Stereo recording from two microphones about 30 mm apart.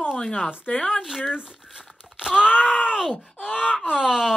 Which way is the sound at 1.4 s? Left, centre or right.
Centre.